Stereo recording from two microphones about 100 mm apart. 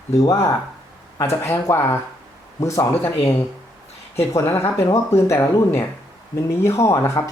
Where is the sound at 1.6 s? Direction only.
25° left (ahead or behind).